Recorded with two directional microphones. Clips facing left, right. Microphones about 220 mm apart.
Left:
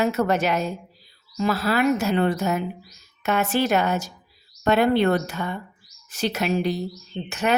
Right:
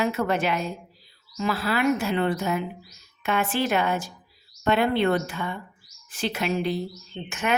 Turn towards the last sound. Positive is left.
turn(degrees=35)  # may be behind; listen again after turning